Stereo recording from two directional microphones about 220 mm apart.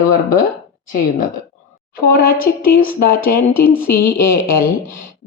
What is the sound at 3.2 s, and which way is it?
A woman's voice, 10° left (ahead or behind).